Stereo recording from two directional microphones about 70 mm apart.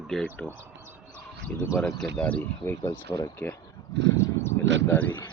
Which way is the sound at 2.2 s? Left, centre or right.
Left.